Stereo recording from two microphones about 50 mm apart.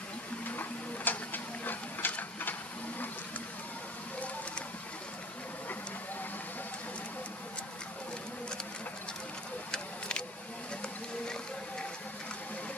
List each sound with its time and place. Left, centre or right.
0.5 s printer: left
9.7 s vehicle: left